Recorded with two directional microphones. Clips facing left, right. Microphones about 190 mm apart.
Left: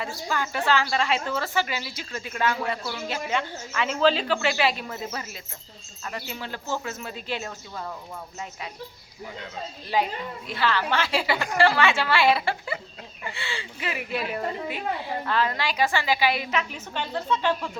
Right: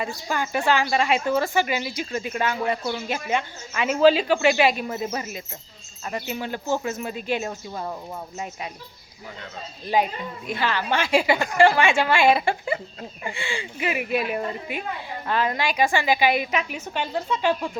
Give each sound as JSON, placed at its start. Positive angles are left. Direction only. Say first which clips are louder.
{"t": 0.0, "sound": "a woman's voice", "louder": "right 2 dB", "side_deg": -15}
{"t": 9.9, "sound": "a woman's voice", "louder": "right 3 dB", "side_deg": -15}